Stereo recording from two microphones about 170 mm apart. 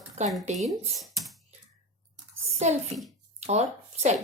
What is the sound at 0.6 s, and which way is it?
Speech, centre (ahead or behind).